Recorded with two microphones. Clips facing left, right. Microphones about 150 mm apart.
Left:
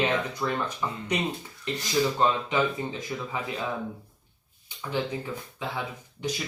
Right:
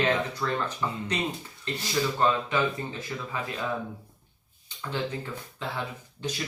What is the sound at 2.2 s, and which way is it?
Speech, 15° left (ahead or behind).